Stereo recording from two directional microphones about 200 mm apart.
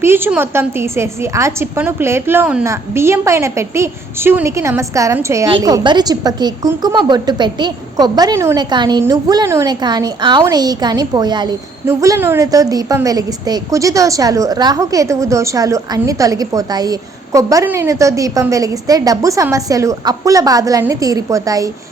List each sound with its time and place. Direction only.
0.0 s a woman's voice: 10° right (ahead or behind)